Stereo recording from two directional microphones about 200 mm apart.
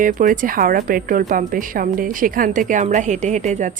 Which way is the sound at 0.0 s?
40° right (ahead or behind).